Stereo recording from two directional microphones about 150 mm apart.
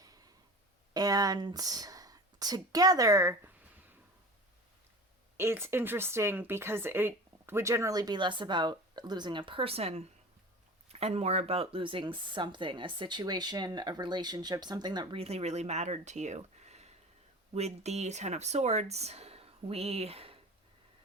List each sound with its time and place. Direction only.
0.9 s speech: 25° right (ahead or behind)
5.4 s speech: 15° right (ahead or behind); by 20.4 s 40° right (ahead or behind)